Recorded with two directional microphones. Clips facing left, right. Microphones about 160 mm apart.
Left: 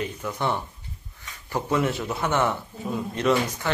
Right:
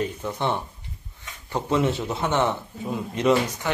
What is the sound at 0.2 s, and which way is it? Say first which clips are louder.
A man's voice: right 1 dB; 25° right (ahead or behind).